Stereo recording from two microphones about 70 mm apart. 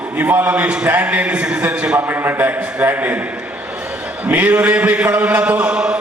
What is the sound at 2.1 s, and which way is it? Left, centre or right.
A man's voice, right.